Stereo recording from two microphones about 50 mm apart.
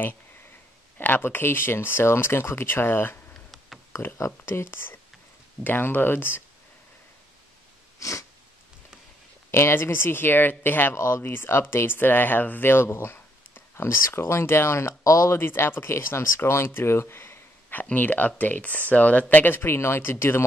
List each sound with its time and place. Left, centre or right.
0.9 s speech: left
4.2 s speech: left
8.0 s sneeze: left
9.5 s speech: left
11.0 s speech: left
11.3 s speech: left
11.7 s speech: left
15.3 s speech: left
19.3 s speech: left